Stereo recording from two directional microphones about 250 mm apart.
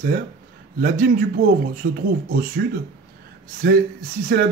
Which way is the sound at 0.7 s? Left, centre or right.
Right.